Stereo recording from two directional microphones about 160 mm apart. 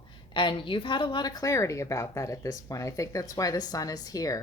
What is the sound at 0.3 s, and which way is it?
Speech, 30° left (ahead or behind).